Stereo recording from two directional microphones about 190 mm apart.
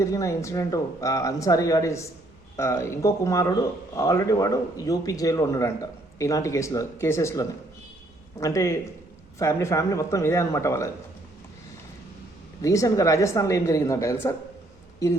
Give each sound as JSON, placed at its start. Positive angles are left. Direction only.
{"t": 0.0, "sound": "a man's voice", "side_deg": 15}
{"t": 12.6, "sound": "a man's voice", "side_deg": 15}